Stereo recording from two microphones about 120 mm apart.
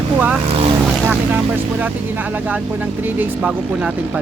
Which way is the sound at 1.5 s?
15° right (ahead or behind).